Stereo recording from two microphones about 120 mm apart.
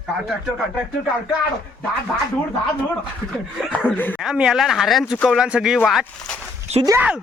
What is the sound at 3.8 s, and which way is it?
Speech, 15° left (ahead or behind).